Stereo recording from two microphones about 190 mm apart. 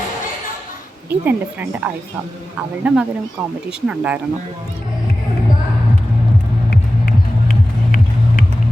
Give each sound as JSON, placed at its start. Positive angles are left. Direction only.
{"t": 1.2, "sound": "speech", "side_deg": -10}
{"t": 6.7, "sound": "music", "side_deg": 50}